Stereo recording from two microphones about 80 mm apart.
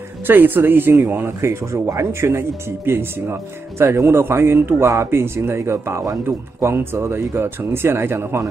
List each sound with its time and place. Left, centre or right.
0.3 s speech: right